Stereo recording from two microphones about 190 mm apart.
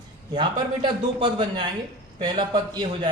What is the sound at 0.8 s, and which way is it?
Speech, 25° right (ahead or behind).